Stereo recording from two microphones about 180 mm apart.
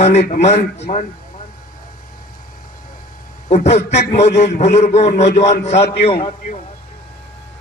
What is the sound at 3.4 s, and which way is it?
A man's voice, 35° left (ahead or behind).